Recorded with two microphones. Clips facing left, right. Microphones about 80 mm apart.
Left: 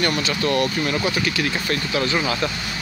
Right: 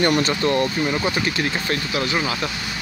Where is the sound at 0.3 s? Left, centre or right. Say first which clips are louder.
Right 1 dB; centre.